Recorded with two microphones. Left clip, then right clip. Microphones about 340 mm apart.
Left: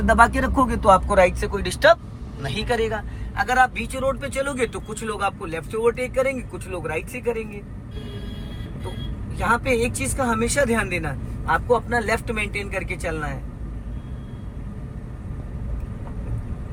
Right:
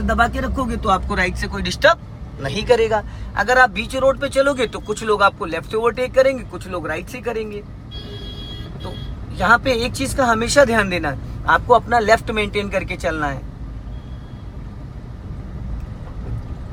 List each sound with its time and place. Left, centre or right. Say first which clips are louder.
0.7 s a man's voice: left 2 dB; centre
9.4 s a man's voice: right 5 dB; centre